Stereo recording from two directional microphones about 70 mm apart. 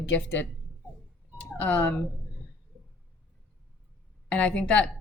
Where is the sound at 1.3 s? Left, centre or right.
Left.